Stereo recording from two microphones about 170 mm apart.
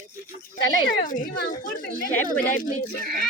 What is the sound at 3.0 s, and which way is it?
Speech, 5° left (ahead or behind).